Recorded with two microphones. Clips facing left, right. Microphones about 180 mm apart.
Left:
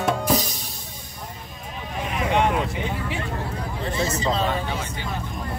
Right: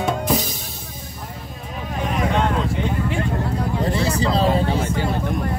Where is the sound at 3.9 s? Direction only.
35° right (ahead or behind).